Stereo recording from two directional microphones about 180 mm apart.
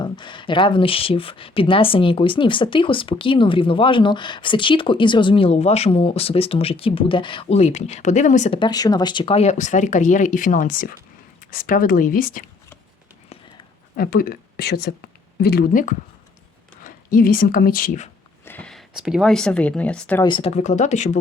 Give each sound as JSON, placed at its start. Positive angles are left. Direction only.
{"t": 0.0, "sound": "speech", "side_deg": 25}
{"t": 8.5, "sound": "speech", "side_deg": 25}
{"t": 13.9, "sound": "a woman's voice", "side_deg": 55}
{"t": 18.4, "sound": "speech", "side_deg": 10}
{"t": 20.2, "sound": "speech", "side_deg": 25}
{"t": 20.6, "sound": "speech", "side_deg": 40}